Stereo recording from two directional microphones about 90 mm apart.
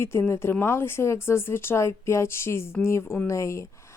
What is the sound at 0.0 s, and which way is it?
A woman's voice, 30° left (ahead or behind).